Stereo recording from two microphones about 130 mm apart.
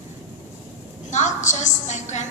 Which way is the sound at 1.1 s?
65° left (ahead or behind).